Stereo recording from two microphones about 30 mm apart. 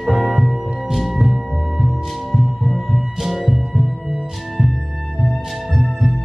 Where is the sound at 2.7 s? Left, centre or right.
Centre.